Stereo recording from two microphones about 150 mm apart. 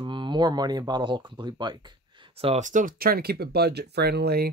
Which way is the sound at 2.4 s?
50° right (ahead or behind).